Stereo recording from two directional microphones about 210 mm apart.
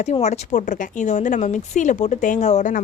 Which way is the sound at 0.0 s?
35° left (ahead or behind).